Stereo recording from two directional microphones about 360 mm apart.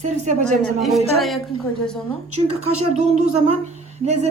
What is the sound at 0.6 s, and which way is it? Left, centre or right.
Speech, centre.